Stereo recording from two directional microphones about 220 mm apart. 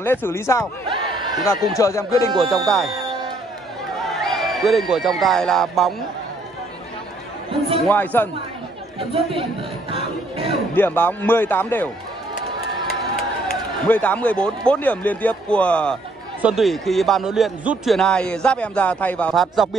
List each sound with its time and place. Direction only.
0.0 s a man's voice: 10° left (ahead or behind)
1.3 s a man's voice: centre (ahead or behind)
1.8 s a man's voice: 15° left (ahead or behind)
2.3 s a man's voice: centre (ahead or behind)
4.1 s a man's voice: centre (ahead or behind)
7.9 s a man's voice: 10° left (ahead or behind)
9.1 s music: 25° right (ahead or behind)
10.7 s a man's voice: 10° left (ahead or behind)
12.4 s crowd: 45° left (ahead or behind)
13.8 s a man's voice: 5° left (ahead or behind)